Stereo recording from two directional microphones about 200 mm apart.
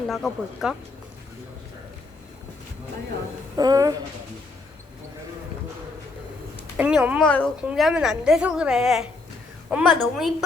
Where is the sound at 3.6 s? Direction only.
20° right (ahead or behind).